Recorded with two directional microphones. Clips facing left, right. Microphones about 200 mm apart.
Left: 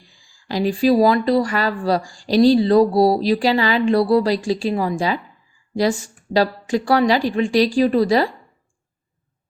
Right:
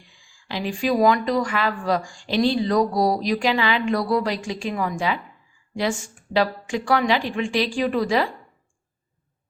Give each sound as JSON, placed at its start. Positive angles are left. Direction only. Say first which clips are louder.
{"t": 0.0, "sound": "speech", "louder": "left 2 dB", "side_deg": 35}
{"t": 6.3, "sound": "speech", "louder": "left 4 dB", "side_deg": 40}